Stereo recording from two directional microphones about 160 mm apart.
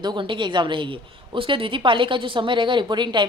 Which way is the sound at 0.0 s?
30° right (ahead or behind).